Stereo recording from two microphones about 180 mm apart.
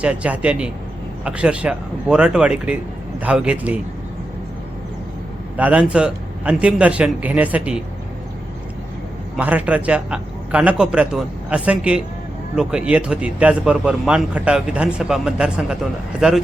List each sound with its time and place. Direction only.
0.0 s a man's voice: 5° right (ahead or behind)
5.5 s a man's voice: 10° right (ahead or behind)
9.3 s a man's voice: 10° right (ahead or behind)